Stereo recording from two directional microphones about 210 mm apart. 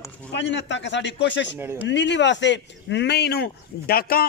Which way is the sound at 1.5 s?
10° right (ahead or behind).